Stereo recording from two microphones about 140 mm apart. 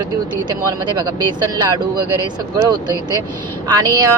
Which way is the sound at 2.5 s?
30° right (ahead or behind).